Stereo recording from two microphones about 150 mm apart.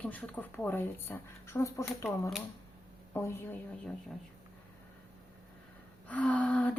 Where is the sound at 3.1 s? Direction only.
15° left (ahead or behind).